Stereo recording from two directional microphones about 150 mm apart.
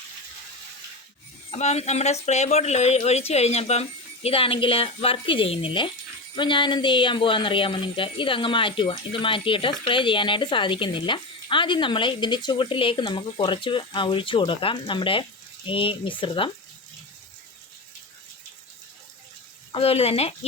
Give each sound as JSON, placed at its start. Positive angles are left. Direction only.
{"t": 1.5, "sound": "speech", "side_deg": 50}
{"t": 19.7, "sound": "speech", "side_deg": 40}